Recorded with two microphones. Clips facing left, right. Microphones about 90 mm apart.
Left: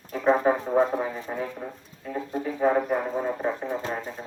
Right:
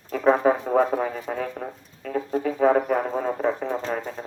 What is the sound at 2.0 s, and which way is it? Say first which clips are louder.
Music: right 5 dB; 90° right.